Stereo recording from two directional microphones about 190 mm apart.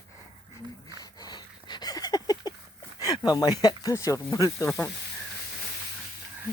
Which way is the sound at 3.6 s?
20° left (ahead or behind).